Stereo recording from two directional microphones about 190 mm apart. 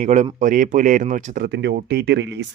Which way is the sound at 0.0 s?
40° right (ahead or behind).